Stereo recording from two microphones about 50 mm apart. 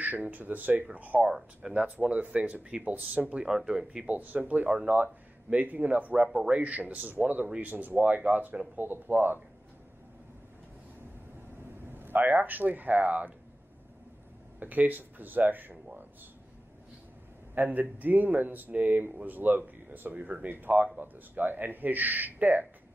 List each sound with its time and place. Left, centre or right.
0.0 s speech: right
1.2 s speech: centre; by 3.3 s right
3.4 s speech: centre
4.1 s speech: right
6.2 s speech: centre
6.5 s speech: right
11.6 s speech: right
14.6 s speech: right
17.6 s speech: right